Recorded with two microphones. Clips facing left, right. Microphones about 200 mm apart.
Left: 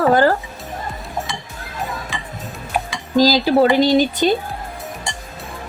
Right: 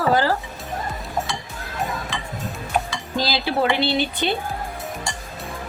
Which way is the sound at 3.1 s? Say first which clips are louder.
Left 9 dB; 40° left (ahead or behind).